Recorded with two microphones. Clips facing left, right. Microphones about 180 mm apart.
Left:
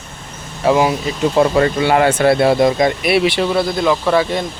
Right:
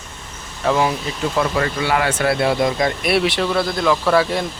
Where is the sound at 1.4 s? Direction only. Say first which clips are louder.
Left 7 dB; 30° left (ahead or behind).